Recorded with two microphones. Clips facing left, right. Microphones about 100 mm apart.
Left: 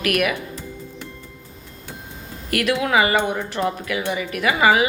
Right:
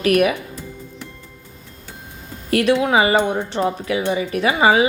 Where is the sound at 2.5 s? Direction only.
30° right (ahead or behind).